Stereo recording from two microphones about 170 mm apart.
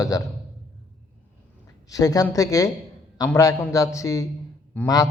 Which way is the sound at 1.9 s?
20° left (ahead or behind).